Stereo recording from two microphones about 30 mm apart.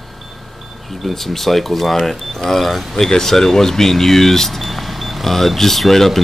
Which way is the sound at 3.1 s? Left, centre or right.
Centre.